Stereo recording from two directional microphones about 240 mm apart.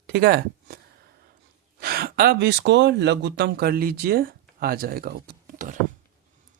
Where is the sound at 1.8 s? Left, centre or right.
Right.